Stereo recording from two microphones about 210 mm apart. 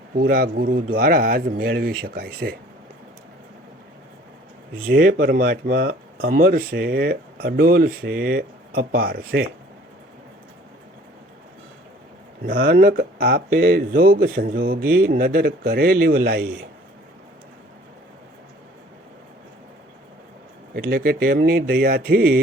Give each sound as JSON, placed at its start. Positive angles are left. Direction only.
{"t": 0.2, "sound": "speech", "side_deg": -45}
{"t": 4.9, "sound": "speech", "side_deg": -45}
{"t": 12.5, "sound": "speech", "side_deg": -45}
{"t": 20.7, "sound": "speech", "side_deg": -45}